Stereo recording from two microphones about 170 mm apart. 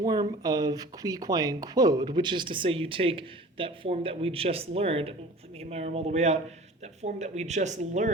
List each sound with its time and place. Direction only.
0.0 s speech: 25° right (ahead or behind); by 8.1 s 45° right (ahead or behind)